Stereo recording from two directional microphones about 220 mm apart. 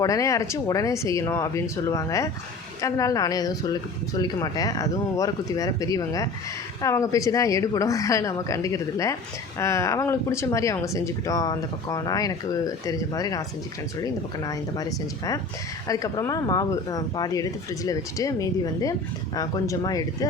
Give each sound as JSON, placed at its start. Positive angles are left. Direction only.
{"t": 0.0, "sound": "speech", "side_deg": 15}